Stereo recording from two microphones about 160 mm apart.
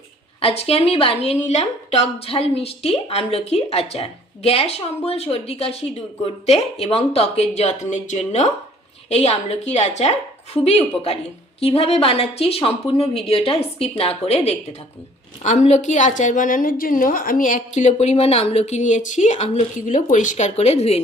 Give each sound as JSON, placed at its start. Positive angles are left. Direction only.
{"t": 0.4, "sound": "a woman's voice", "side_deg": 40}